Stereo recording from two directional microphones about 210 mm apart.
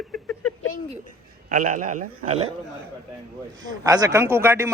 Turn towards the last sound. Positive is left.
turn(degrees=-10)  # may be behind; listen again after turning